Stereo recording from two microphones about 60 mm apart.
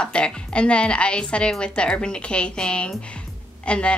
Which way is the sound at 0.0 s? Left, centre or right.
Centre.